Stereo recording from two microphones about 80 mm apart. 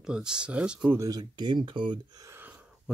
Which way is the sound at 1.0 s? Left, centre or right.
Right.